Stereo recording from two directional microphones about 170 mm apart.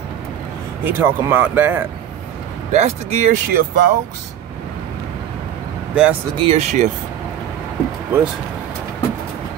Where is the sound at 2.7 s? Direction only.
40° right (ahead or behind).